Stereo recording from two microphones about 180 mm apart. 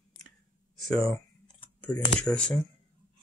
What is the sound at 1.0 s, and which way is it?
Computer keyboard, 20° left (ahead or behind).